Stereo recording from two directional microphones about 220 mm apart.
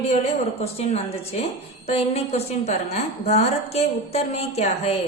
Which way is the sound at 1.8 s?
30° left (ahead or behind).